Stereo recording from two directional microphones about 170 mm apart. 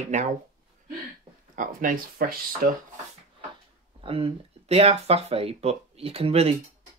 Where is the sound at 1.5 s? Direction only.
50° right (ahead or behind).